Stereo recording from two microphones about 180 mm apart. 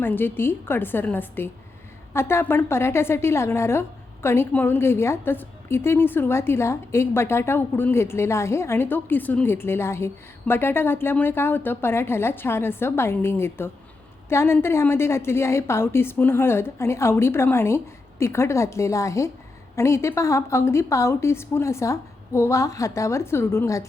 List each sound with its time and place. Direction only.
0.0 s a woman's voice: 10° left (ahead or behind)